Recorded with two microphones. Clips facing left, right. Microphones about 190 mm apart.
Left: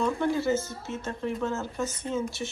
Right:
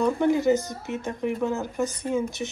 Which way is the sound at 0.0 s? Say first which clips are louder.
Right 5 dB; 15° right (ahead or behind).